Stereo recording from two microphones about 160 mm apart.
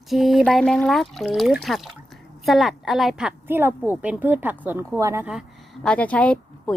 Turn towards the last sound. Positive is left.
turn(degrees=10)  # may be behind; listen again after turning